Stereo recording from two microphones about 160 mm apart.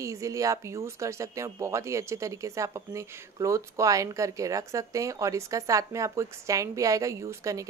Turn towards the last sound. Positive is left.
turn(degrees=-20)  # may be behind; listen again after turning